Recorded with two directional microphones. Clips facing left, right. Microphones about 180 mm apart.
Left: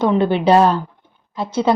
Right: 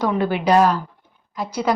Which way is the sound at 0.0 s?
25° left (ahead or behind).